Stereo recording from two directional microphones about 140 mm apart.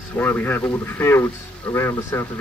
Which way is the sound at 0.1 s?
15° left (ahead or behind).